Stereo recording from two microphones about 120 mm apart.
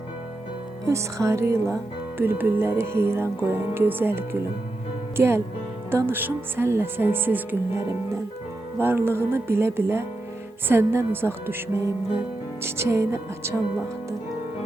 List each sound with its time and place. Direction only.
0.9 s speech: 25° right (ahead or behind)